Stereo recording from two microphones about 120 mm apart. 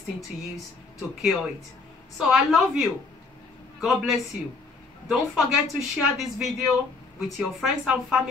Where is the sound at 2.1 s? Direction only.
Centre (ahead or behind).